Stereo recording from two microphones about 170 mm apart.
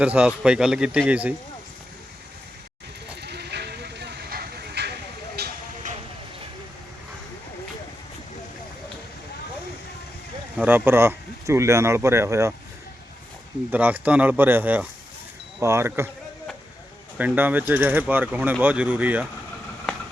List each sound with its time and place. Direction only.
0.0 s a man's voice: 5° right (ahead or behind)
3.2 s hiss: 75° right (ahead or behind)
5.4 s vehicle: 60° right (ahead or behind)
10.6 s speech: 10° right (ahead or behind)
13.7 s speech: 10° right (ahead or behind)
17.2 s speech: 10° right (ahead or behind)